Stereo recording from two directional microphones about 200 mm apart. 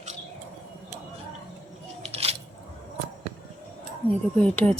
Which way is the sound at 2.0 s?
30° right (ahead or behind).